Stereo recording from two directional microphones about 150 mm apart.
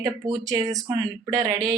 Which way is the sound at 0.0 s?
25° right (ahead or behind).